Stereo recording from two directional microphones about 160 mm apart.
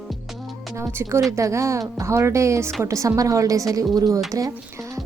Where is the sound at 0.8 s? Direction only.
15° right (ahead or behind).